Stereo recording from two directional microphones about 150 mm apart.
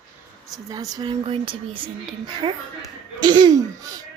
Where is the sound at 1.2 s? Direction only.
35° right (ahead or behind).